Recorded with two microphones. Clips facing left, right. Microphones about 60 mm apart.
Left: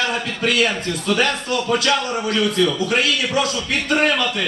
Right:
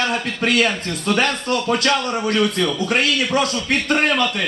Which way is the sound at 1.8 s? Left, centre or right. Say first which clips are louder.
Right 1 dB; centre.